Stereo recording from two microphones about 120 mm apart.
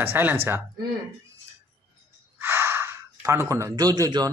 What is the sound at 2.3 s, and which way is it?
Speech, 20° right (ahead or behind).